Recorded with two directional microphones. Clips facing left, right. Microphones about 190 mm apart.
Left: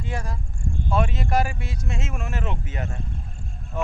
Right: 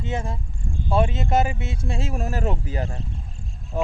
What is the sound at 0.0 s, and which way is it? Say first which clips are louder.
Speech: right 3 dB; 25° right (ahead or behind).